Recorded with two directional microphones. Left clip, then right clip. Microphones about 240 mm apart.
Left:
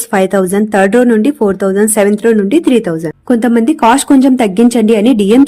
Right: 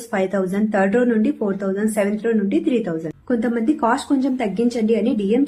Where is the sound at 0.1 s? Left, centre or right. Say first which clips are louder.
Left 10 dB; left.